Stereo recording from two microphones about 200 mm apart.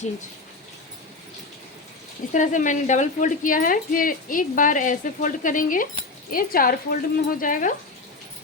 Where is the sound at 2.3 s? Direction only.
40° left (ahead or behind).